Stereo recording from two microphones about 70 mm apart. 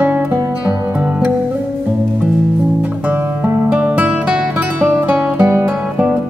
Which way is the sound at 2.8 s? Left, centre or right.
Right.